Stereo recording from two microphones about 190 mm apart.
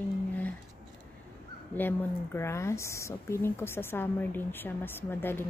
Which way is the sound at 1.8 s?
10° left (ahead or behind).